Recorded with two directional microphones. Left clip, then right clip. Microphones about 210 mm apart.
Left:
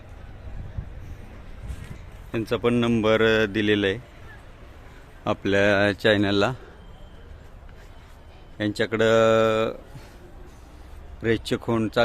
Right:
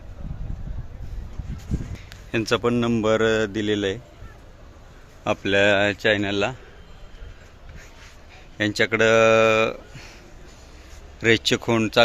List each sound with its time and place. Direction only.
2.3 s a man's voice: centre (ahead or behind)
5.2 s a man's voice: 15° left (ahead or behind)
8.5 s a man's voice: centre (ahead or behind)
11.2 s a man's voice: 5° right (ahead or behind)